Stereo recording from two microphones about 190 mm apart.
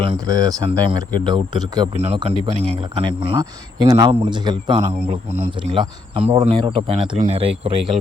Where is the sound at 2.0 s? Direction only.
35° right (ahead or behind).